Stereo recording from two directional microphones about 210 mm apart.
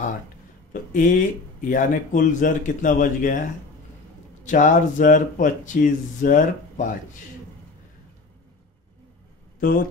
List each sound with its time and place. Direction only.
0.9 s speech: 40° left (ahead or behind)
4.5 s speech: 35° left (ahead or behind)